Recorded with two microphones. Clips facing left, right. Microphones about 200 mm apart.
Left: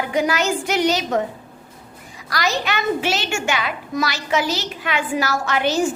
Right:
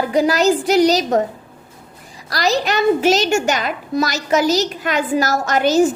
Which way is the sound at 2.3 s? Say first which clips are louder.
Right 5 dB; 35° right (ahead or behind).